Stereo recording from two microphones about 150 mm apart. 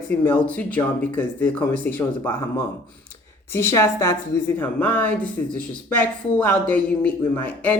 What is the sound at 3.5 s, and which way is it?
Speech, 15° left (ahead or behind).